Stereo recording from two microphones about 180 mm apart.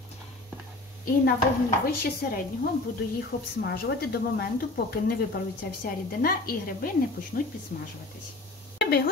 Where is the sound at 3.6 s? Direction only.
60° left (ahead or behind).